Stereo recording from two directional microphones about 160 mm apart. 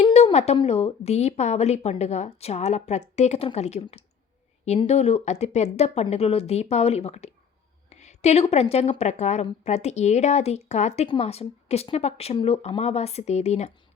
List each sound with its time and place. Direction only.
0.1 s a woman's voice: 40° left (ahead or behind)